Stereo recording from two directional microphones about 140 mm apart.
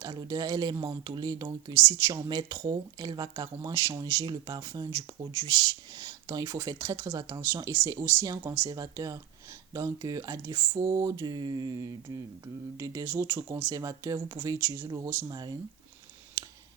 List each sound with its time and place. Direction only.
0.0 s speech: 30° right (ahead or behind)